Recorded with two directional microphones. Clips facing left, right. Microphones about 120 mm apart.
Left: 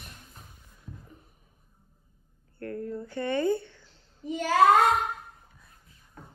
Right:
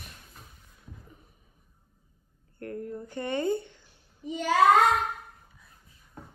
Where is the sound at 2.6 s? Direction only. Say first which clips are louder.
Left 2 dB; 20° right (ahead or behind).